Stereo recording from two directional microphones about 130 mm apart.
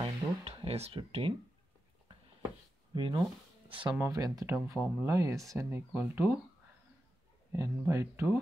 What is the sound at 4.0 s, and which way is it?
Speech, 25° right (ahead or behind).